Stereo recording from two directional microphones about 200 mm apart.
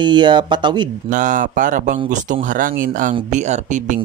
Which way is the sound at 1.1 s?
40° right (ahead or behind).